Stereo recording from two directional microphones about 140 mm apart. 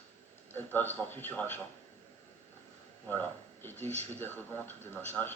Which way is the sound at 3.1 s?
15° left (ahead or behind).